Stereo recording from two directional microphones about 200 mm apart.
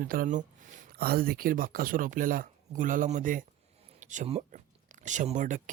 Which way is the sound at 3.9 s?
35° right (ahead or behind).